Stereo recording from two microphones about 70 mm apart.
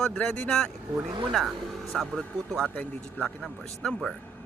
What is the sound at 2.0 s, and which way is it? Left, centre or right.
Speech, centre.